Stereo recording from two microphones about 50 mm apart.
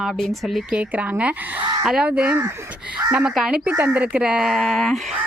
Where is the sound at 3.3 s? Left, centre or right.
Centre.